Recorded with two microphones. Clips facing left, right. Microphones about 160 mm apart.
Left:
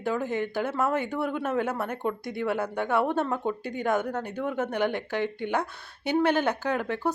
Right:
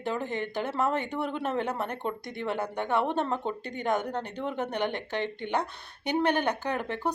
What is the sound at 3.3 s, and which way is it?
Speech, 10° left (ahead or behind).